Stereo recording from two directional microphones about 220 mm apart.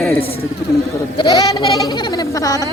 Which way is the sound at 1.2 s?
20° left (ahead or behind).